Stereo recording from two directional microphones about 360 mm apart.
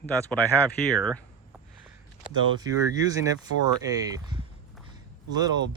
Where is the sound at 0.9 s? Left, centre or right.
Centre.